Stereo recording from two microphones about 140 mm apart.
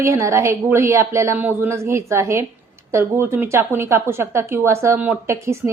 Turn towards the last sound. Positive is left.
turn(degrees=-20)  # may be behind; listen again after turning